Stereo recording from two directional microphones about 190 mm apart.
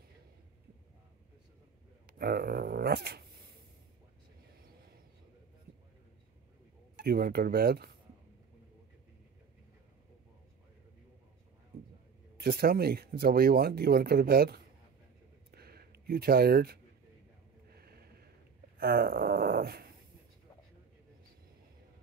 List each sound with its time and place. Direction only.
2.0 s speech: 55° right (ahead or behind)
7.0 s speech: 55° right (ahead or behind)
12.4 s speech: 55° right (ahead or behind)
15.5 s a sound: 55° right (ahead or behind)